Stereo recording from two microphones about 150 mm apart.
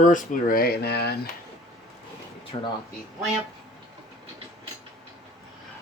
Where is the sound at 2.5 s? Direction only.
35° left (ahead or behind).